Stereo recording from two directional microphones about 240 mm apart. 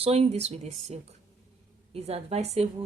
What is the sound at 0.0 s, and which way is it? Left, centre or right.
Speech, right.